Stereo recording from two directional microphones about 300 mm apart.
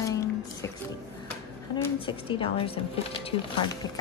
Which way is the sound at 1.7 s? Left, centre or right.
Centre.